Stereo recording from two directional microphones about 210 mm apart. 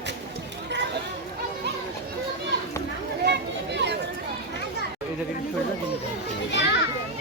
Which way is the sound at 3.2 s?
55° right (ahead or behind).